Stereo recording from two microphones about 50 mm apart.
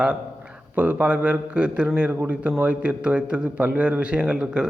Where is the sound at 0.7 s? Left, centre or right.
Right.